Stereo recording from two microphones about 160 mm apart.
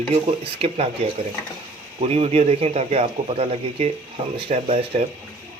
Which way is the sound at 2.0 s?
40° right (ahead or behind).